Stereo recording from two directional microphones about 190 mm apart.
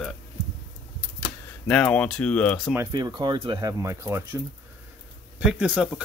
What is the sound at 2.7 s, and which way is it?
Speech, 15° right (ahead or behind).